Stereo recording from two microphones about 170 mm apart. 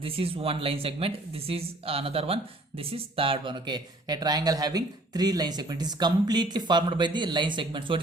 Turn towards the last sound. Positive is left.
turn(degrees=-30)  # may be behind; listen again after turning